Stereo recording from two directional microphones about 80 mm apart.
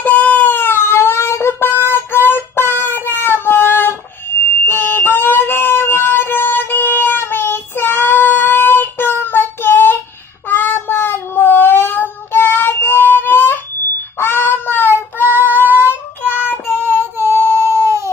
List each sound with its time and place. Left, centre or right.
0.0 s cat: centre
2.2 s music: left
3.2 s fire alarm: left
10.5 s child singing: left
15.3 s female singing: right
16.4 s child singing: left
16.8 s a sound: right